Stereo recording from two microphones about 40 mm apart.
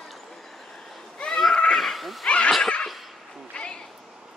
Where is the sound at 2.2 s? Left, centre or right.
Left.